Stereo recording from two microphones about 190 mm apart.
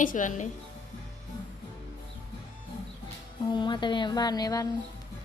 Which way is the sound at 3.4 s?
25° left (ahead or behind).